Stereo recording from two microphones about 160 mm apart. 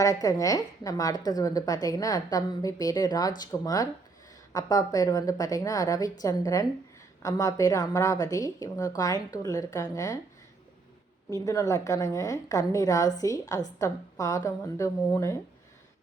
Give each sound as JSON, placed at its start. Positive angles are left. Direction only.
{"t": 0.0, "sound": "a woman's voice", "side_deg": 20}
{"t": 11.3, "sound": "a woman's voice", "side_deg": 20}